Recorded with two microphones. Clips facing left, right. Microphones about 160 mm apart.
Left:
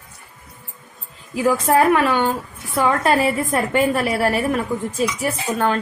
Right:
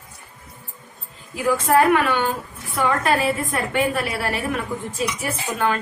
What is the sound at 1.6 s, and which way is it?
A woman's voice, 35° left (ahead or behind).